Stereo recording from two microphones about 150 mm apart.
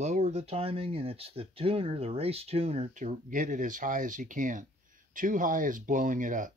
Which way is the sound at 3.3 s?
60° right (ahead or behind).